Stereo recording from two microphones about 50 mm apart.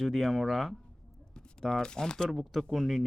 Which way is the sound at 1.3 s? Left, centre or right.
Centre.